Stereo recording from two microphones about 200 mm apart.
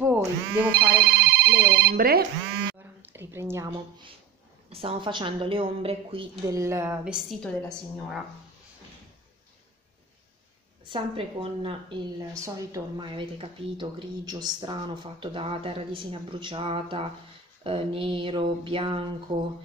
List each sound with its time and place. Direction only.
0.0 s a sound: 10° right (ahead or behind)
0.7 s speech: 45° right (ahead or behind)
3.0 s a sound: 10° right (ahead or behind)
4.6 s speech: 25° right (ahead or behind); by 7.2 s 10° right (ahead or behind)
7.2 s a woman's voice: centre (ahead or behind)
10.9 s speech: 25° right (ahead or behind)
12.4 s speech: 15° right (ahead or behind)